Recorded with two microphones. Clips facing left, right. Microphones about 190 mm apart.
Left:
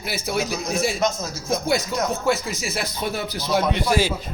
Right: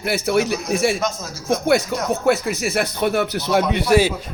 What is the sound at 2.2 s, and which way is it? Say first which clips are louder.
Speech: right 5 dB; 65° right (ahead or behind).